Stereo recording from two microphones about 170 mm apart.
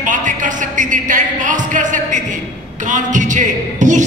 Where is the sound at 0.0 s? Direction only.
50° right (ahead or behind).